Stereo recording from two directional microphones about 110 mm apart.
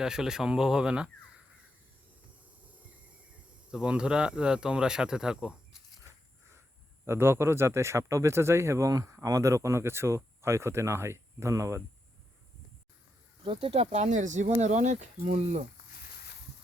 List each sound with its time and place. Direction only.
0.0 s speech: 5° right (ahead or behind)
3.7 s speech: 10° right (ahead or behind)
7.0 s speech: 20° right (ahead or behind)
13.4 s speech: 55° right (ahead or behind); by 15.6 s 90° right